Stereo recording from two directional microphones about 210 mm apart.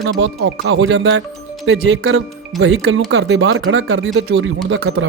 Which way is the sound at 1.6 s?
70° right (ahead or behind).